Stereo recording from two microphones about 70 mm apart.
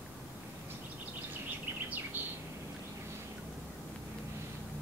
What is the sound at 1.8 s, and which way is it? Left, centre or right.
Bird, right.